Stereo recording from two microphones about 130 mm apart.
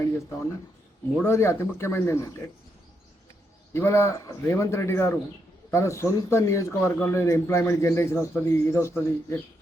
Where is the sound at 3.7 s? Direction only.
20° left (ahead or behind).